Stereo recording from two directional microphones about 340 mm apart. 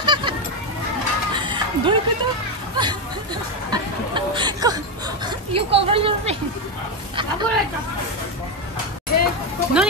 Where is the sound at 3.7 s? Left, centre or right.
Centre.